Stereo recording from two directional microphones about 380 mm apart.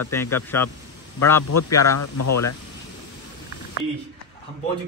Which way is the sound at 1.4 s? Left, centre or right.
Left.